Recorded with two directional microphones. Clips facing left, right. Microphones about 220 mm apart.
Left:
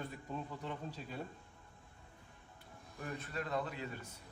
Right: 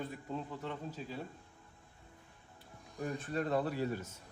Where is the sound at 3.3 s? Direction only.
35° right (ahead or behind).